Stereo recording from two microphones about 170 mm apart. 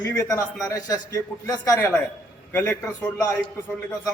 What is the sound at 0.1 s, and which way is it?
A man's voice, 20° left (ahead or behind).